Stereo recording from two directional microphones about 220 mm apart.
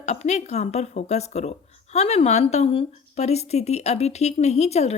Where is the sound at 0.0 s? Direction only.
30° left (ahead or behind).